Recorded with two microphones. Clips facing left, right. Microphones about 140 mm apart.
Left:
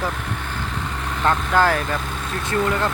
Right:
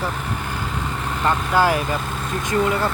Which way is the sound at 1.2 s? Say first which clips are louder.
Even; 5° right (ahead or behind).